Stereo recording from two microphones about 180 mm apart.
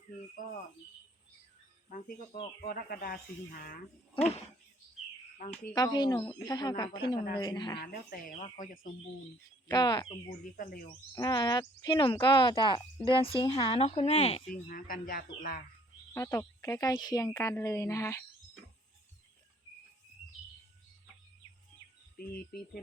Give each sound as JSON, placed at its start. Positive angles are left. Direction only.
{"t": 0.4, "sound": "speech", "side_deg": 45}
{"t": 1.9, "sound": "speech", "side_deg": 50}
{"t": 5.7, "sound": "speech", "side_deg": 20}
{"t": 7.8, "sound": "speech", "side_deg": 55}
{"t": 9.6, "sound": "speech", "side_deg": 25}
{"t": 10.6, "sound": "speech", "side_deg": 55}
{"t": 11.1, "sound": "speech", "side_deg": 20}
{"t": 14.7, "sound": "speech", "side_deg": 50}
{"t": 16.1, "sound": "a woman's voice", "side_deg": 15}
{"t": 22.2, "sound": "speech", "side_deg": 55}